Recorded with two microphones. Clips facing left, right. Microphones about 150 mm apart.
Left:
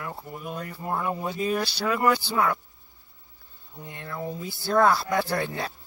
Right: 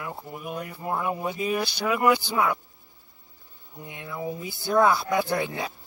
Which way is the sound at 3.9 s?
10° right (ahead or behind).